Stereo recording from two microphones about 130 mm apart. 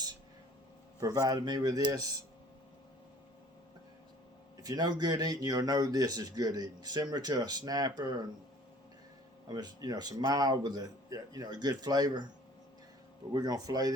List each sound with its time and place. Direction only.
0.9 s speech: 30° right (ahead or behind)
4.6 s speech: 30° right (ahead or behind)
9.5 s speech: 30° right (ahead or behind)
13.3 s speech: 30° right (ahead or behind)